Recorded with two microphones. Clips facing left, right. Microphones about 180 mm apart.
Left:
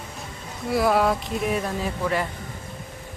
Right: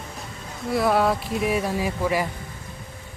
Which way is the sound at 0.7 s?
Centre (ahead or behind).